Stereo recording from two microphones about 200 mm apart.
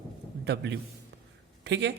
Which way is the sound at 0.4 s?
60° right (ahead or behind).